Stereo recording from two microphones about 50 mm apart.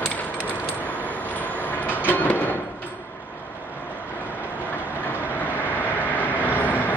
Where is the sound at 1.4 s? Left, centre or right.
Left.